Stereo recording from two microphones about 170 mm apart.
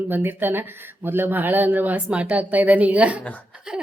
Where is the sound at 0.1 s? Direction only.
10° right (ahead or behind).